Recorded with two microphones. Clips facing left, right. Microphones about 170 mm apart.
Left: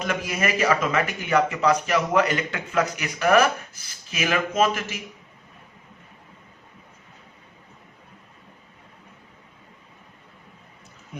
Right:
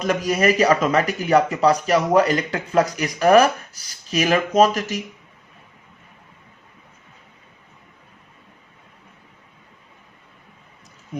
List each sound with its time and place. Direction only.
0.0 s speech: 40° right (ahead or behind)